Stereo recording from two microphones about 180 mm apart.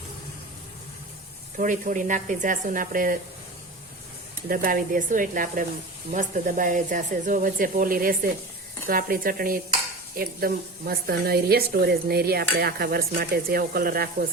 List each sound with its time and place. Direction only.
1.5 s speech: 45° right (ahead or behind)
4.4 s a woman's voice: 50° right (ahead or behind)